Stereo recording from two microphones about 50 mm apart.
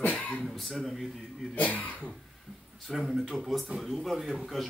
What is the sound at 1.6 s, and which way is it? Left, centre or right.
Speech, left.